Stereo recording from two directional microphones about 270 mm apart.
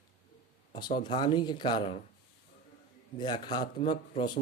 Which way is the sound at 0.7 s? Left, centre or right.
Centre.